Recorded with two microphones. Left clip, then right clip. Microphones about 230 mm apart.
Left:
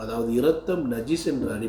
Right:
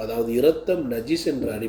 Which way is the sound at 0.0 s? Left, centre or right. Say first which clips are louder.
Right 3 dB; centre.